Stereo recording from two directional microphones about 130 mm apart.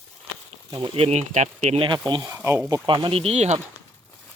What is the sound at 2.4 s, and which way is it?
Speech, 20° right (ahead or behind).